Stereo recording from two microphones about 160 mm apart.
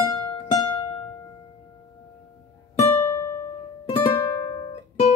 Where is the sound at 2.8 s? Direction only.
15° left (ahead or behind).